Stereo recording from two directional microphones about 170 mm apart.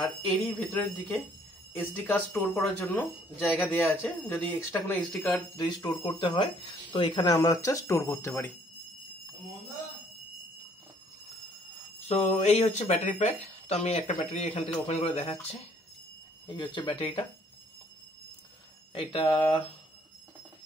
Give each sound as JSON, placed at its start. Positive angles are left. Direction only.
{"t": 0.3, "sound": "speech", "side_deg": 10}
{"t": 5.6, "sound": "speech", "side_deg": 25}
{"t": 12.1, "sound": "speech", "side_deg": 35}
{"t": 16.4, "sound": "speech", "side_deg": 30}
{"t": 18.9, "sound": "speech", "side_deg": 30}